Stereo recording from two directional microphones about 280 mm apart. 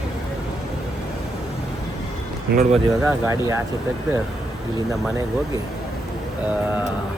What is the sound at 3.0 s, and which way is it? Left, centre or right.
Speech, centre.